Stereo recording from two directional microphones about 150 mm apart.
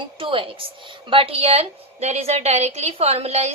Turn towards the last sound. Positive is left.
turn(degrees=-45)  # may be behind; listen again after turning